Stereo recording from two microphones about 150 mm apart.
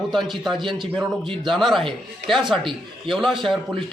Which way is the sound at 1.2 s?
35° right (ahead or behind).